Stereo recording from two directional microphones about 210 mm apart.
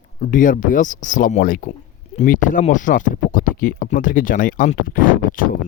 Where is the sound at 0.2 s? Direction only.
40° left (ahead or behind).